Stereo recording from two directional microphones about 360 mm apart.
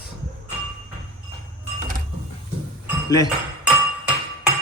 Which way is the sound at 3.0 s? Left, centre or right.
Centre.